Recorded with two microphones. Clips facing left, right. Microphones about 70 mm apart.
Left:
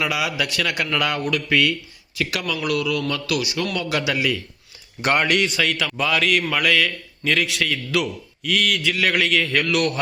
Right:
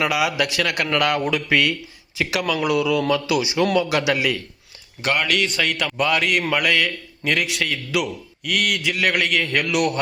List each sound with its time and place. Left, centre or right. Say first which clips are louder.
0.0 s a man's voice: right 3 dB; centre
3.8 s a man's voice: right 3 dB; centre
5.0 s a man's voice: left 2 dB; left
5.5 s a man's voice: even; centre